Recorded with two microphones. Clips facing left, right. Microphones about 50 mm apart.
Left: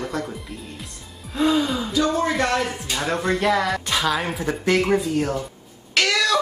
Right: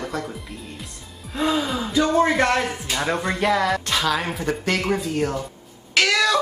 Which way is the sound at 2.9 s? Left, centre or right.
Centre.